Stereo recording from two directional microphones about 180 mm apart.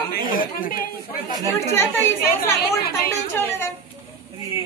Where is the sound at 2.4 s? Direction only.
60° left (ahead or behind).